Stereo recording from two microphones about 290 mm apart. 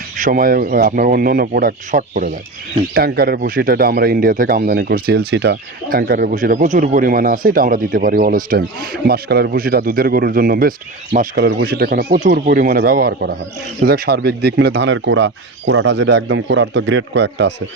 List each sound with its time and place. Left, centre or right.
0.2 s speech: right